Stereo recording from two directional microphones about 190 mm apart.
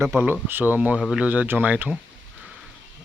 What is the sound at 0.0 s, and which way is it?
Speech, 10° right (ahead or behind).